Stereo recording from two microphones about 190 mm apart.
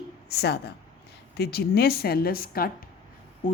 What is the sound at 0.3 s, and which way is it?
Speech, 60° left (ahead or behind).